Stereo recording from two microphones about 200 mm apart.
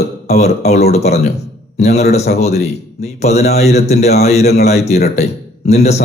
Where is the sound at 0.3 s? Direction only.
35° left (ahead or behind).